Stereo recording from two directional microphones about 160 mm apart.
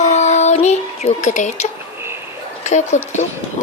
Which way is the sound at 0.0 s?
45° left (ahead or behind).